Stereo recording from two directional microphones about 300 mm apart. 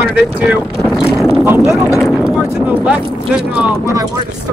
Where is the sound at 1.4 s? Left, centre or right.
Centre.